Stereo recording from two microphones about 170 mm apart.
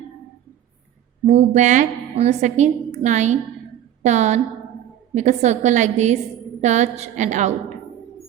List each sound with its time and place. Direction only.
1.3 s a woman's voice: 40° right (ahead or behind)